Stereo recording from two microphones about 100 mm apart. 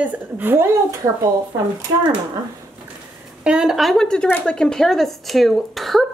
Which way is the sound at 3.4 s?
5° right (ahead or behind).